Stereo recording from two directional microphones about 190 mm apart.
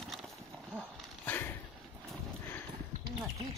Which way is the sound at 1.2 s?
10° left (ahead or behind).